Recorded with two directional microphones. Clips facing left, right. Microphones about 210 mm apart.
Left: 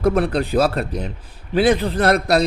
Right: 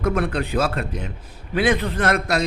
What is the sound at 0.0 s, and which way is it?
A man's voice, 35° left (ahead or behind).